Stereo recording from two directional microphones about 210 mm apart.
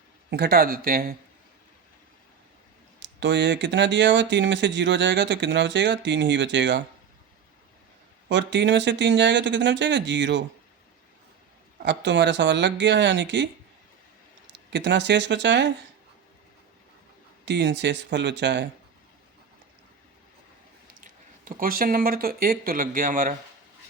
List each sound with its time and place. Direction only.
0.3 s speech: 50° right (ahead or behind)
3.0 s speech: 60° right (ahead or behind)
8.3 s speech: 60° right (ahead or behind)
11.8 s speech: 60° right (ahead or behind)
14.5 s speech: 55° right (ahead or behind)
17.4 s speech: 55° right (ahead or behind)
21.0 s speech: 40° right (ahead or behind)